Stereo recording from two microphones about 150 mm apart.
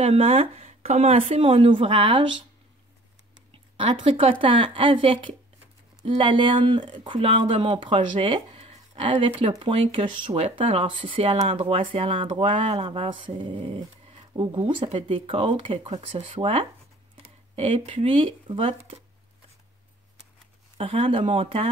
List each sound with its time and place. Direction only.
0.0 s speech: 40° right (ahead or behind)
3.5 s speech: 35° right (ahead or behind)
20.7 s speech: 40° right (ahead or behind)